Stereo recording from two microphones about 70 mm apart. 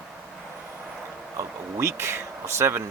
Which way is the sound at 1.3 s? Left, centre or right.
Right.